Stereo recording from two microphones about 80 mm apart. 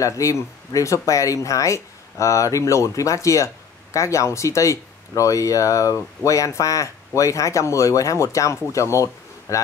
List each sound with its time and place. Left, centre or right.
0.0 s speech: left